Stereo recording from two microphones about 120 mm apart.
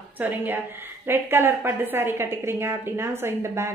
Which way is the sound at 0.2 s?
15° right (ahead or behind).